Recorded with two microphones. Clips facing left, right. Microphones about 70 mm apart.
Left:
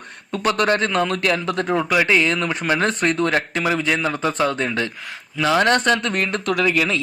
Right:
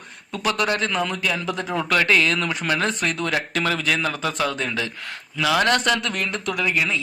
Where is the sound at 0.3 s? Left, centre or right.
Left.